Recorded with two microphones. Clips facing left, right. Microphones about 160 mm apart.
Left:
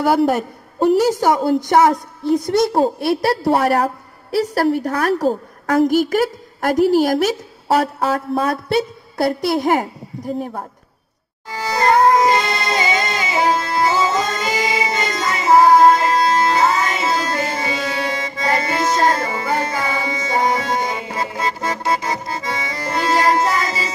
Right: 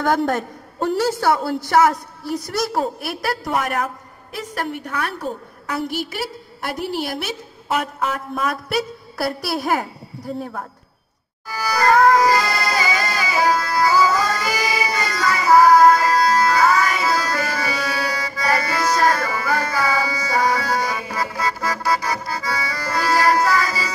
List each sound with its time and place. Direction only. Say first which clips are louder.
0.0 s a woman's voice: left 4 dB; 10° left (ahead or behind)
11.4 s music: left 1 dB; 25° left (ahead or behind)